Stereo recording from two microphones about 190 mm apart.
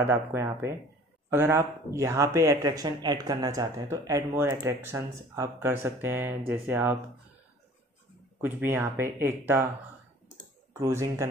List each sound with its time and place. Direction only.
0.0 s speech: 10° right (ahead or behind)
8.4 s speech: 10° right (ahead or behind)
10.7 s speech: 15° right (ahead or behind)